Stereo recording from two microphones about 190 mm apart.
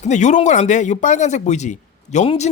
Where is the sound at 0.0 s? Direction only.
40° left (ahead or behind).